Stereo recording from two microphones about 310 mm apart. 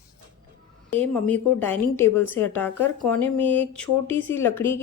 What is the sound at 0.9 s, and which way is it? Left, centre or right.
A woman's voice, centre.